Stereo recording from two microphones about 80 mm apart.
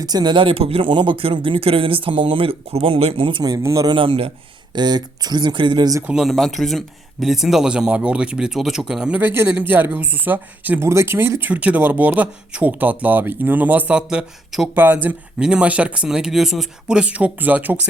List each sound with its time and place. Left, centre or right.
0.0 s speech: right
3.4 s speech: right
3.8 s speech: right
4.7 s speech: right
6.2 s speech: centre
9.2 s speech: right
10.8 s speech: right; by 14.7 s centre
14.8 s speech: right